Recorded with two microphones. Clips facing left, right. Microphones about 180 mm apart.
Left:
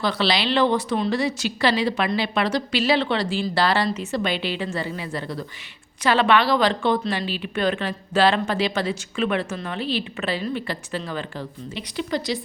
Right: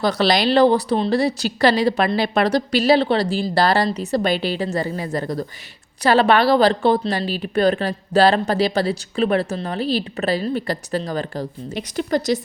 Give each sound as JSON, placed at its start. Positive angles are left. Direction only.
{"t": 0.0, "sound": "a woman's voice", "side_deg": -40}